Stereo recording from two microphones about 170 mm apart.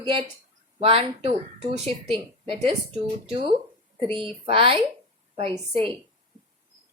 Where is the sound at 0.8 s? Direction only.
35° right (ahead or behind).